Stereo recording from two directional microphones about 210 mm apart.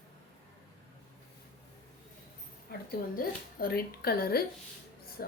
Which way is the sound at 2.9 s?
45° left (ahead or behind).